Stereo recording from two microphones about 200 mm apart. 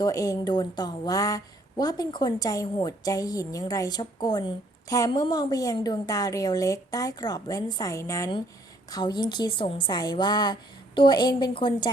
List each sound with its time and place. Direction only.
0.0 s a woman's voice: 15° left (ahead or behind)